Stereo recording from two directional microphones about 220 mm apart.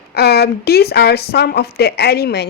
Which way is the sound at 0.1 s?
45° left (ahead or behind).